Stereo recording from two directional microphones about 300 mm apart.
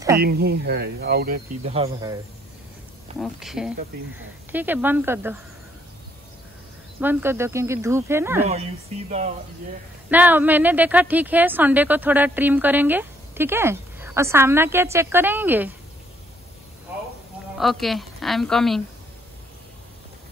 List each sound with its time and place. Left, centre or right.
0.2 s speech: right; by 2.1 s centre
3.2 s a woman's voice: centre
7.0 s speech: centre
10.0 s a woman's voice: centre
17.6 s a woman's voice: centre